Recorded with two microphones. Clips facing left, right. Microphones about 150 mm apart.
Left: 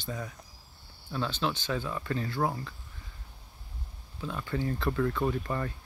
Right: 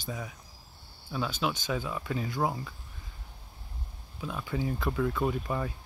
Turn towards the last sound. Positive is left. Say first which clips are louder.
# even
turn(degrees=-10)  # may be behind; listen again after turning